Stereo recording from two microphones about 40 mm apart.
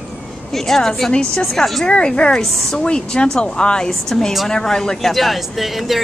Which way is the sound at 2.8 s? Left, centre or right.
Left.